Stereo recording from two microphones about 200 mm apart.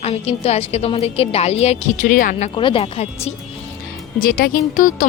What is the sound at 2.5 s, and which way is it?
Speech, 25° left (ahead or behind).